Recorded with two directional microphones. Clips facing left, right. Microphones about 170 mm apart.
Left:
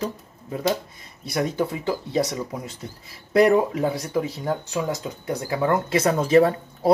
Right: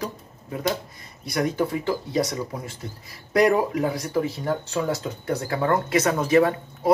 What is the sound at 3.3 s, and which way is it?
Speech, 25° left (ahead or behind).